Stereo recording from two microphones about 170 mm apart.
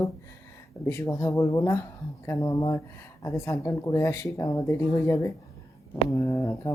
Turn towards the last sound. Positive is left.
turn(degrees=20)  # may be behind; listen again after turning